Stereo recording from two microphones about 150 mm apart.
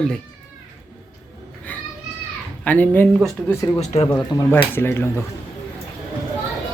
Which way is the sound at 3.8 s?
50° left (ahead or behind).